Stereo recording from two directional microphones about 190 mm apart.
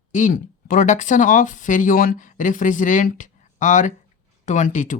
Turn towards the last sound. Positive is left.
turn(degrees=40)  # may be behind; listen again after turning